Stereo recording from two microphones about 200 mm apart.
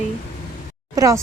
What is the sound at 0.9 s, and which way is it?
Speech, 15° right (ahead or behind).